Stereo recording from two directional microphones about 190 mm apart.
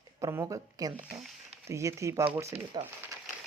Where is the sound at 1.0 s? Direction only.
5° right (ahead or behind).